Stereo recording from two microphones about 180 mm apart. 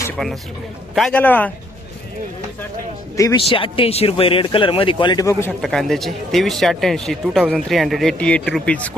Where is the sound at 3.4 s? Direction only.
30° left (ahead or behind).